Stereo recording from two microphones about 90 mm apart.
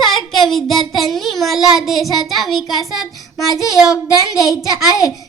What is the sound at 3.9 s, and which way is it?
Speech, 40° left (ahead or behind).